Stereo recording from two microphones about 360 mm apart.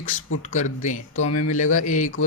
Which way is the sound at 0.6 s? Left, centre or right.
Centre.